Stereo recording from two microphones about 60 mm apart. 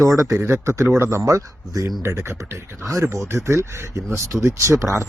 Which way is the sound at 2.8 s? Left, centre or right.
Right.